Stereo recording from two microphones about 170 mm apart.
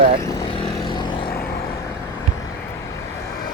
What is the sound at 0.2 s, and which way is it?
Vehicle, 20° left (ahead or behind).